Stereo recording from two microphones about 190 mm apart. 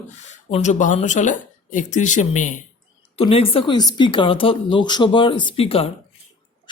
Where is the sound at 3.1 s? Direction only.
30° left (ahead or behind).